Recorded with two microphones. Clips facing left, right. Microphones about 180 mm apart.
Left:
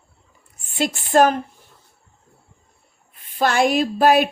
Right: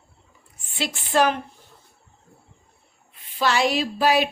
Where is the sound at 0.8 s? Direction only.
45° left (ahead or behind).